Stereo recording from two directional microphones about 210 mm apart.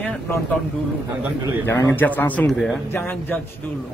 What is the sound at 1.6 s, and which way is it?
A man's voice, 10° left (ahead or behind).